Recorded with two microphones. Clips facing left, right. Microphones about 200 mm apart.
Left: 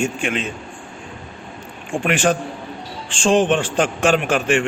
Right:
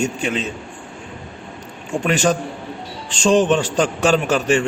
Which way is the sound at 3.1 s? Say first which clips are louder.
Right 1 dB; 40° right (ahead or behind).